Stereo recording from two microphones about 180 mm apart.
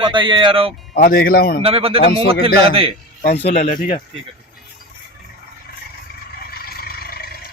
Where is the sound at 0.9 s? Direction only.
55° left (ahead or behind).